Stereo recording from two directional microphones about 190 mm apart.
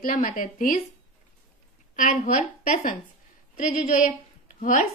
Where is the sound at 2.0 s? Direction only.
40° left (ahead or behind).